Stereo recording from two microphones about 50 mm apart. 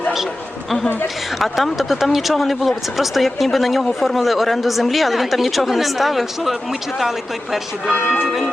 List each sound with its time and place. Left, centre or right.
1.4 s speech: centre